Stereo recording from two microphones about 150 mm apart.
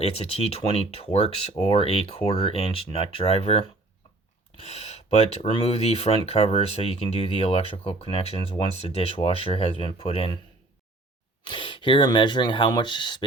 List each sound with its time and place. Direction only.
0.0 s speech: 40° left (ahead or behind)
11.4 s speech: 35° left (ahead or behind)